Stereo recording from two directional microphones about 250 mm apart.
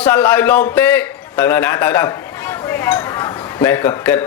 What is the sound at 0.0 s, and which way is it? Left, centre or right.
A man's voice, centre.